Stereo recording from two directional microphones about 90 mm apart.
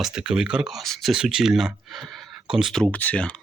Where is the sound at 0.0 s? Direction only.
10° right (ahead or behind).